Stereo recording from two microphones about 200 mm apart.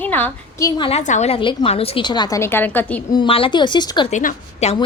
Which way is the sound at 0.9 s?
35° left (ahead or behind).